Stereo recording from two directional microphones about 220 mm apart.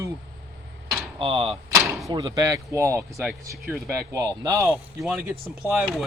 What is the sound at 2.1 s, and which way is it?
Speech, 20° right (ahead or behind).